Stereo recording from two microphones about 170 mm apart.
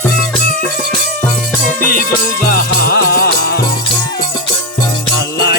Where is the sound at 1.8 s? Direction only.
60° left (ahead or behind).